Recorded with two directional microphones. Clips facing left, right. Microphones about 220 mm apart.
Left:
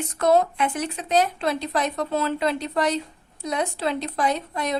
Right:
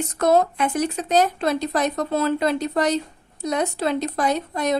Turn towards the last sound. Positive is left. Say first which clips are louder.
# right 3 dB
turn(degrees=-45)  # may be behind; listen again after turning